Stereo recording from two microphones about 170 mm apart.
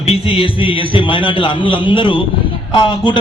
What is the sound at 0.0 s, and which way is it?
A man's voice, 35° left (ahead or behind).